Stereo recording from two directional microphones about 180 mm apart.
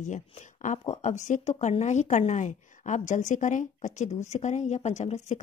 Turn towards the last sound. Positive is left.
turn(degrees=40)  # may be behind; listen again after turning